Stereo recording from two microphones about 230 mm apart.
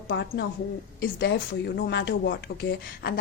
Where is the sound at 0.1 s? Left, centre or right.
Left.